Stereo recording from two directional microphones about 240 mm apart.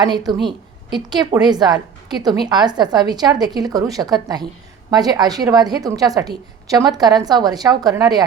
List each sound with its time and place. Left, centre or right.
0.0 s a woman's voice: centre